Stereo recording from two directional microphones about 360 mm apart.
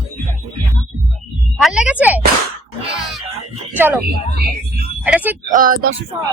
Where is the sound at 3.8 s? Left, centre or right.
Centre.